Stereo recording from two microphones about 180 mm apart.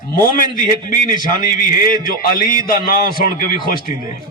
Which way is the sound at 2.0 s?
50° left (ahead or behind).